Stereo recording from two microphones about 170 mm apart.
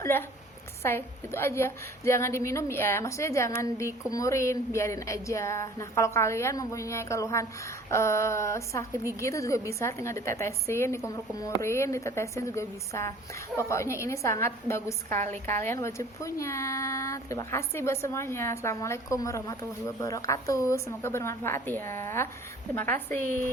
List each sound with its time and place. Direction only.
0.0 s a woman's voice: 15° left (ahead or behind)